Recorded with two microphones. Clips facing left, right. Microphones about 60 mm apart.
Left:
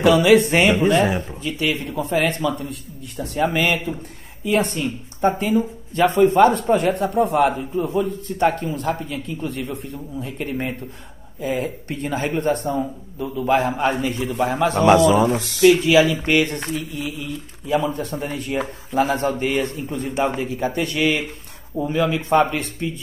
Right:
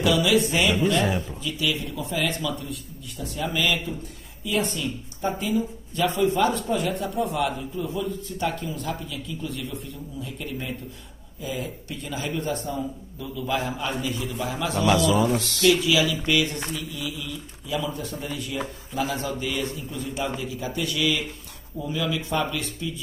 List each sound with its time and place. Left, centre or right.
0.0 s a man's voice: left
15.3 s speech: centre
15.6 s a man's voice: left